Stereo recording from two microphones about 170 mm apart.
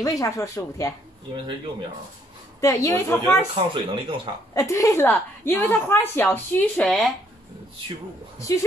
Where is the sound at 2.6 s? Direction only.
20° left (ahead or behind).